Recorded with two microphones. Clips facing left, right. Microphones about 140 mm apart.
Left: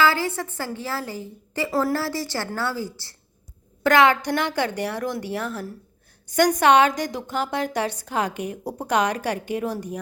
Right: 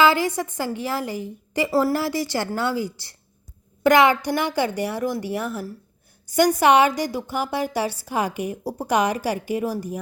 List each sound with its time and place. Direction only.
0.0 s a woman's voice: 15° right (ahead or behind)